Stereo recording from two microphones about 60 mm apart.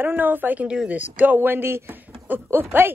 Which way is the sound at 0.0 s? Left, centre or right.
Right.